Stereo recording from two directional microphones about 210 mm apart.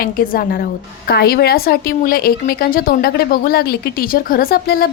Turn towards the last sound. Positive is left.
turn(degrees=45)  # may be behind; listen again after turning